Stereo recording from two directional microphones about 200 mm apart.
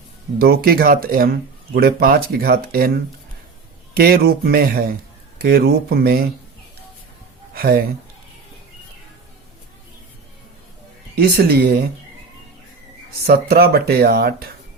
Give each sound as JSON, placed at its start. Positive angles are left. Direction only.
{"t": 0.3, "sound": "speech", "side_deg": -50}
{"t": 7.5, "sound": "speech", "side_deg": -50}
{"t": 11.1, "sound": "speech", "side_deg": -50}
{"t": 13.2, "sound": "speech", "side_deg": -50}